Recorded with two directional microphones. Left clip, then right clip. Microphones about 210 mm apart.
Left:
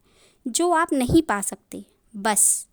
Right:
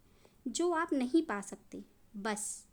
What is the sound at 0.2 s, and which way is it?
A woman's voice, 50° left (ahead or behind).